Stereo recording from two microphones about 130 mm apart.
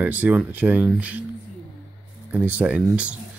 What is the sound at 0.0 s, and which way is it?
Speech, 10° right (ahead or behind).